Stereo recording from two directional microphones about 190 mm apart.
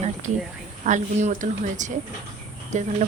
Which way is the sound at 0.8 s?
40° right (ahead or behind).